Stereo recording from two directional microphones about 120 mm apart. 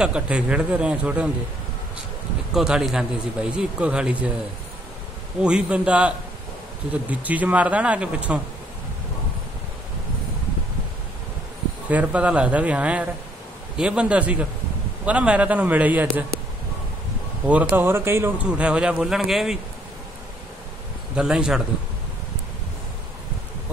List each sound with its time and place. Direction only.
0.0 s speech: 10° right (ahead or behind)
2.5 s speech: 5° right (ahead or behind)
5.4 s speech: 10° right (ahead or behind)
11.9 s speech: 10° right (ahead or behind)
17.5 s speech: 10° right (ahead or behind)
18.5 s speech: 10° right (ahead or behind)
21.2 s speech: 5° right (ahead or behind)